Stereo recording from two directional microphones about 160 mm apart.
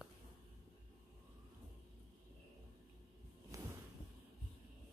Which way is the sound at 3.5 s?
20° right (ahead or behind).